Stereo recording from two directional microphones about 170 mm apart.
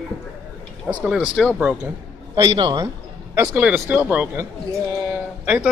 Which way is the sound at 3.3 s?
10° right (ahead or behind).